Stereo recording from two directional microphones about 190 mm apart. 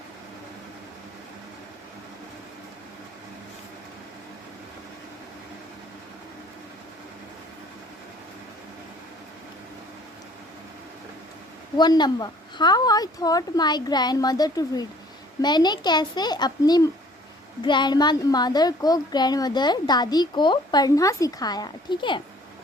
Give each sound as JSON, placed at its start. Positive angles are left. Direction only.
{"t": 11.8, "sound": "a child's voice", "side_deg": 20}